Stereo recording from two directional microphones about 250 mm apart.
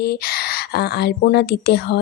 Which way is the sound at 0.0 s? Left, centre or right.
Left.